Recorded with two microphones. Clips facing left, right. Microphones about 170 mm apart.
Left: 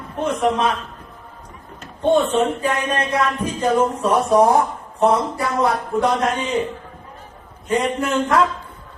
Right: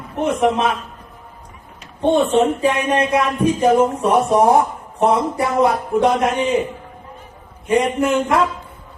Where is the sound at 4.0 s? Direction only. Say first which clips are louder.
Right 1 dB; 25° right (ahead or behind).